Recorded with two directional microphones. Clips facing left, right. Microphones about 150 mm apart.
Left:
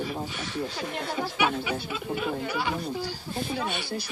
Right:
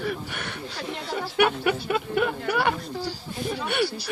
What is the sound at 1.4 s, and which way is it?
Speech, 60° right (ahead or behind).